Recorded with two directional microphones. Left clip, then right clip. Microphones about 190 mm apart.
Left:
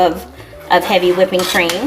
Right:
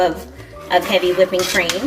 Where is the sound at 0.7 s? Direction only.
40° left (ahead or behind).